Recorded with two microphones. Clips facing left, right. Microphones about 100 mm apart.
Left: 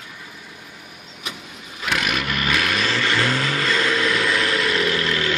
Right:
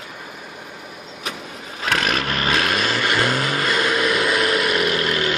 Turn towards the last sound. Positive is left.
turn(degrees=-20)  # may be behind; listen again after turning